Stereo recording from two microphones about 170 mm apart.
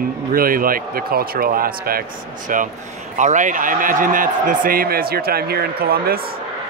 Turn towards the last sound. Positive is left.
turn(degrees=-60)  # may be behind; listen again after turning